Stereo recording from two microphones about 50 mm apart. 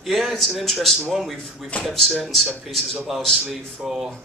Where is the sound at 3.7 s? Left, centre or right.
Centre.